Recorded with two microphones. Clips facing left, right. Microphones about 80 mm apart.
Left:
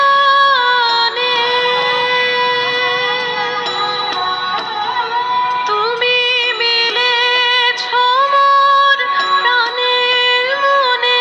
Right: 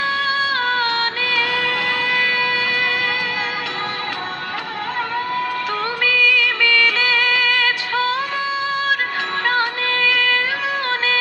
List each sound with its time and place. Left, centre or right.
0.0 s music: left
6.0 s music of bollywood: left